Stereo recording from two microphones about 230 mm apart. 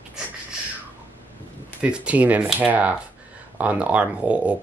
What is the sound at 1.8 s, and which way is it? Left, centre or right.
Speech, centre.